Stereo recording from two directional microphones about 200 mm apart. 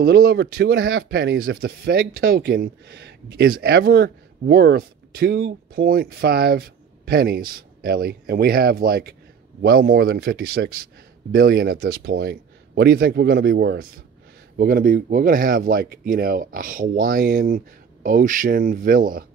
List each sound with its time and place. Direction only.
0.0 s speech: 50° right (ahead or behind)